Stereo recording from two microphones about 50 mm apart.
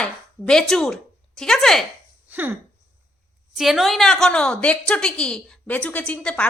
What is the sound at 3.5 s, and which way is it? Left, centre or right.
A woman's voice, centre.